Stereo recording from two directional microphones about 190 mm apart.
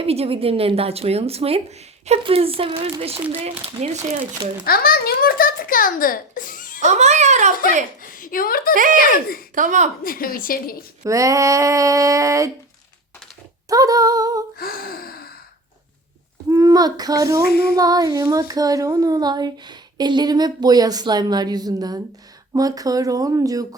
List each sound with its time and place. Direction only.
0.0 s a woman's voice: 30° right (ahead or behind)
3.7 s child singing: 30° right (ahead or behind)
4.6 s a child's voice: 50° left (ahead or behind)
6.8 s a woman's voice: 35° right (ahead or behind)
8.0 s speech: 45° left (ahead or behind)
8.7 s a woman's voice: 45° right (ahead or behind)
10.0 s a child's voice: 50° left (ahead or behind)
11.0 s speech: 15° right (ahead or behind)
13.7 s child singing: 20° right (ahead or behind)
14.6 s a child's voice: 50° left (ahead or behind)
16.5 s child singing: 20° right (ahead or behind)
17.4 s female singing: 55° left (ahead or behind)
17.7 s child singing: 20° right (ahead or behind)